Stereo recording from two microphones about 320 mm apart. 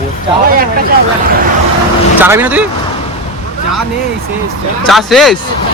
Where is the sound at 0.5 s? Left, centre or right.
Right.